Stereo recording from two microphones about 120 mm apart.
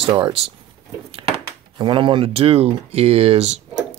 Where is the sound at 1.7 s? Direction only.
40° right (ahead or behind); by 3.6 s 60° right (ahead or behind).